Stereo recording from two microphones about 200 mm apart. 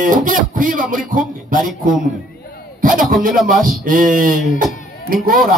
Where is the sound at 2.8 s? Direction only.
45° right (ahead or behind).